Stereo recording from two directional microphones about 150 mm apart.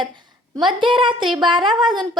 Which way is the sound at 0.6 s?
35° right (ahead or behind).